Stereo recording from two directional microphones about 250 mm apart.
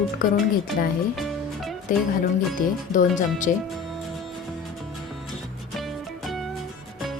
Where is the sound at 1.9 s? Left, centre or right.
Left.